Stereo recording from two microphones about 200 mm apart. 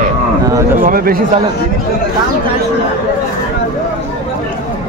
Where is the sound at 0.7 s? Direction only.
45° right (ahead or behind).